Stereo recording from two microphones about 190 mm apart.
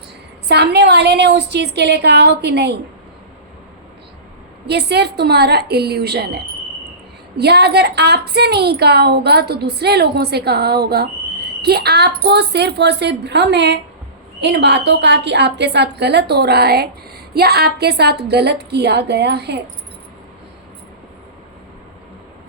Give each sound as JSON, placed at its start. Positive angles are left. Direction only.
{"t": 0.4, "sound": "a woman's voice", "side_deg": -60}
{"t": 4.6, "sound": "a woman's voice", "side_deg": -60}